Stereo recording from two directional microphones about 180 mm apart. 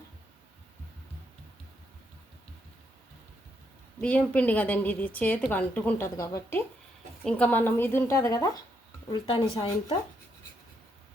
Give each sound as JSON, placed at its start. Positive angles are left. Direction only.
{"t": 4.0, "sound": "a woman's voice", "side_deg": 5}
{"t": 9.2, "sound": "speech", "side_deg": 30}